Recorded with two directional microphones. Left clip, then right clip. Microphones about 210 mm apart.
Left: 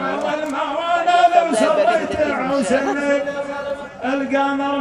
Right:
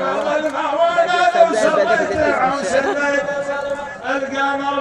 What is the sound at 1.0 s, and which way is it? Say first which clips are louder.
Chant: even; 35° left (ahead or behind).